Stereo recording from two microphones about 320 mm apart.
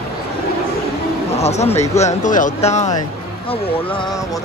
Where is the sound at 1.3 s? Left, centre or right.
Centre.